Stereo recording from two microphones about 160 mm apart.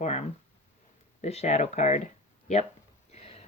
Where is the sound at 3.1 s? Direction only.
40° left (ahead or behind).